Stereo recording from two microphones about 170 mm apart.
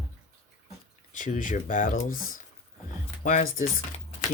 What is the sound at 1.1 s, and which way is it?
Speech, 50° left (ahead or behind).